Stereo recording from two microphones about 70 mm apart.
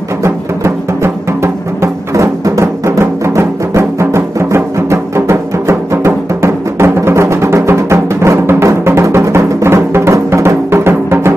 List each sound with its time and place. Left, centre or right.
0.2 s music: right